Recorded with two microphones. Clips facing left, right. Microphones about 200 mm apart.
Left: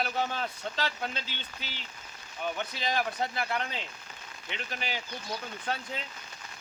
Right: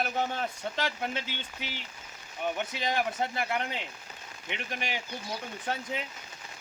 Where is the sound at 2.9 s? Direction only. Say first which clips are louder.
Even; 15° right (ahead or behind).